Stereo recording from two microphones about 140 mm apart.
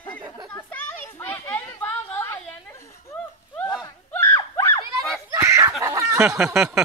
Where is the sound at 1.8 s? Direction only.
15° left (ahead or behind).